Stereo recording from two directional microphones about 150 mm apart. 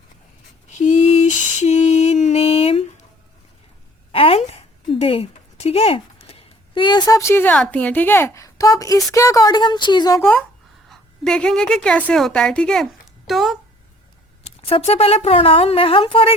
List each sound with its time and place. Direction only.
0.7 s mantra: 55° left (ahead or behind)
4.1 s a sound: 40° left (ahead or behind); by 9.0 s 25° left (ahead or behind)
9.1 s a woman's voice: 20° left (ahead or behind)
10.2 s a woman's voice: 10° left (ahead or behind)
14.4 s speech: 40° left (ahead or behind)